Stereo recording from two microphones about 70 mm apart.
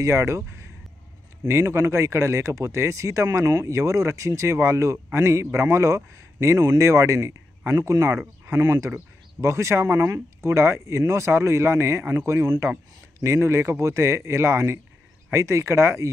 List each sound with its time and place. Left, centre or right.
0.0 s speech: right